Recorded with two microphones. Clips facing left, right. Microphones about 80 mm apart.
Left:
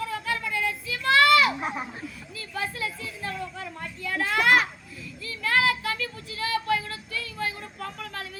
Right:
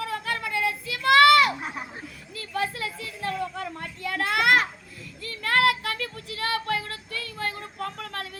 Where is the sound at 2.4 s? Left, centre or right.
Right.